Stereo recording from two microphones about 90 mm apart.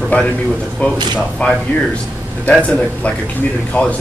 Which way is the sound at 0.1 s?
15° left (ahead or behind).